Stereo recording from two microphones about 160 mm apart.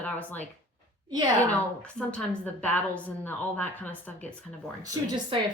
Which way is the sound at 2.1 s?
10° left (ahead or behind).